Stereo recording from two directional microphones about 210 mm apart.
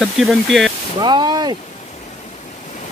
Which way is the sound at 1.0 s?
20° right (ahead or behind).